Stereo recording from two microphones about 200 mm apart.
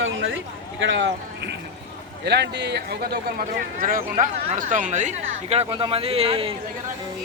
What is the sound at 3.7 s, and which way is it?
Speech, 45° right (ahead or behind).